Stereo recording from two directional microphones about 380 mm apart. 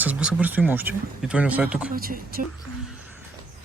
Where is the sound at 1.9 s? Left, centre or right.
Right.